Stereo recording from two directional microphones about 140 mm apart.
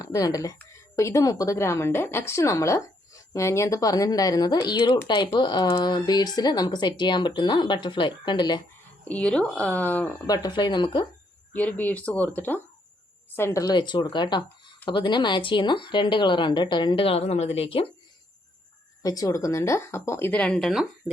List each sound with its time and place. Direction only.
0.0 s a woman's voice: 25° left (ahead or behind)
9.0 s speech: 10° left (ahead or behind)
10.2 s speech: 30° left (ahead or behind)
11.5 s speech: 10° left (ahead or behind); by 17.8 s 40° left (ahead or behind)
19.0 s a woman's voice: 25° left (ahead or behind); by 20.8 s centre (ahead or behind)